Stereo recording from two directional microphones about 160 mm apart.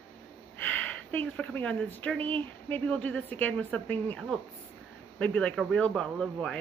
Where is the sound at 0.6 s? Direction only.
10° left (ahead or behind).